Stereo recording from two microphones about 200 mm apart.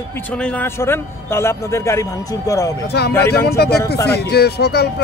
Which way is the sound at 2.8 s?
55° left (ahead or behind).